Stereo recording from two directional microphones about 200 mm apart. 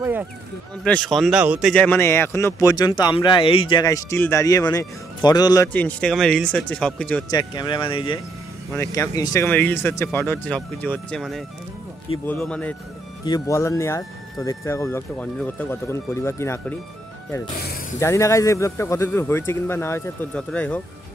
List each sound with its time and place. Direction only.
0.0 s speech: 10° right (ahead or behind)
0.8 s speech: 5° left (ahead or behind)
5.7 s speech: 5° left (ahead or behind)
7.2 s speech: 20° left (ahead or behind)
8.7 s speech: 15° left (ahead or behind)
13.2 s speech: 15° left (ahead or behind)
17.9 s speech: 15° left (ahead or behind)